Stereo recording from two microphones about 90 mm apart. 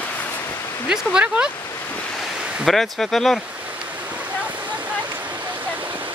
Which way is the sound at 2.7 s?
5° left (ahead or behind).